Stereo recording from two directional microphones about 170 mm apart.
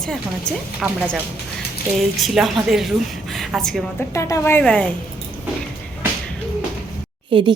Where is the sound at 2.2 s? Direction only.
Centre (ahead or behind).